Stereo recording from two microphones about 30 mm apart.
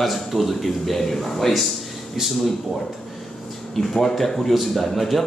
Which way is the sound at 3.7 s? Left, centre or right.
Centre.